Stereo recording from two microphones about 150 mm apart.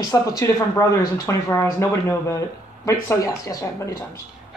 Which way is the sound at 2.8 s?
20° left (ahead or behind).